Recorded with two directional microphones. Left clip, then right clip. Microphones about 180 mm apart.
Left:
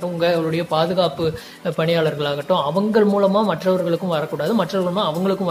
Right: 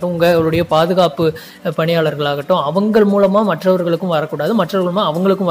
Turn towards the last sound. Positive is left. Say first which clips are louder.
# right 4 dB
turn(degrees=-25)  # may be behind; listen again after turning